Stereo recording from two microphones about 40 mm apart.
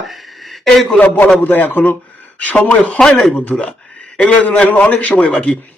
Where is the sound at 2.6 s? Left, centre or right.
Left.